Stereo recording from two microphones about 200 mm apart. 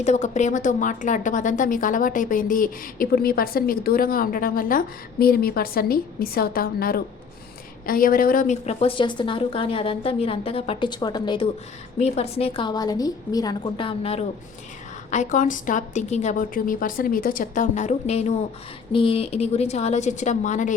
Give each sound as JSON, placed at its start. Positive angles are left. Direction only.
{"t": 0.0, "sound": "a woman's voice", "side_deg": 35}
{"t": 11.9, "sound": "a woman's voice", "side_deg": 30}